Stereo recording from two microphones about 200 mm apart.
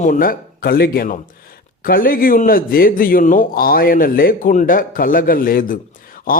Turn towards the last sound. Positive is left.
turn(degrees=45)  # may be behind; listen again after turning